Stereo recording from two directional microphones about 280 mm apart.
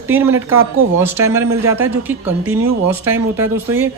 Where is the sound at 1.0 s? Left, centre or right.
Centre.